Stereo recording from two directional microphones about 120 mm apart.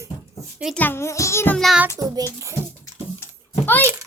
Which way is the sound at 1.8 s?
30° right (ahead or behind).